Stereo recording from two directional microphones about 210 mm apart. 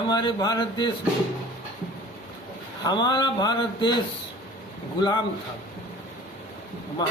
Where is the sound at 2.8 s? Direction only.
20° left (ahead or behind).